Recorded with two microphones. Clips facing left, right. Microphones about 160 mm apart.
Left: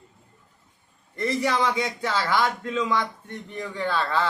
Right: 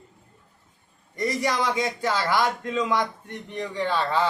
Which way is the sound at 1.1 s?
15° right (ahead or behind).